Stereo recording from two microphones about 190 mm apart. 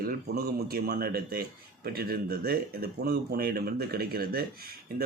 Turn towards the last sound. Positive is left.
turn(degrees=-55)  # may be behind; listen again after turning